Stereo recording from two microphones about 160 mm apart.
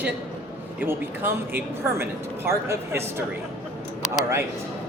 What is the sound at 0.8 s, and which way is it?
Speech, 10° right (ahead or behind).